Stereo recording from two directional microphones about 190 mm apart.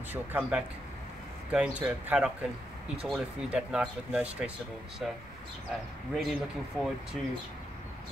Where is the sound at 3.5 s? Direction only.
5° right (ahead or behind).